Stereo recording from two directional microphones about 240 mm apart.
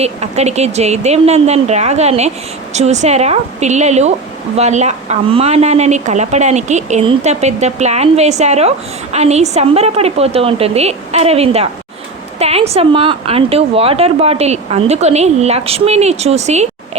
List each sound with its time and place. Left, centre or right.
0.0 s speech: right